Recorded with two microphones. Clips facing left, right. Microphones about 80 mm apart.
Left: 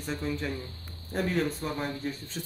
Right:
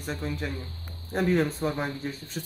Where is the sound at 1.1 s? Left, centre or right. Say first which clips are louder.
Right 4 dB; right.